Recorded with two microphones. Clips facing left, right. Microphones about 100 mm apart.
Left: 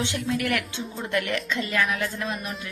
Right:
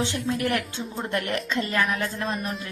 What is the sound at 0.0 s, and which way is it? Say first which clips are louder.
A woman's voice: right 1 dB; 35° right (ahead or behind).